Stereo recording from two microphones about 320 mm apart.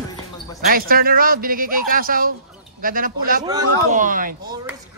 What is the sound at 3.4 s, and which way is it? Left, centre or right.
Speech, centre.